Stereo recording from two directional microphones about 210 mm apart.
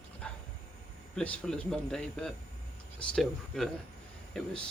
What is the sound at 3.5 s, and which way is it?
Speech, centre (ahead or behind).